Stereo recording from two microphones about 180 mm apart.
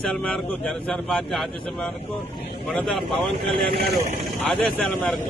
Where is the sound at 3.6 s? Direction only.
60° right (ahead or behind).